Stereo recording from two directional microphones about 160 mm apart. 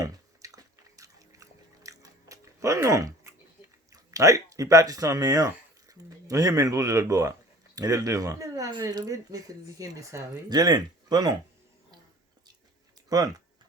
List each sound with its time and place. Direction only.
0.0 s drip: 20° right (ahead or behind)
3.9 s speech: 20° right (ahead or behind)
13.1 s speech: 25° right (ahead or behind)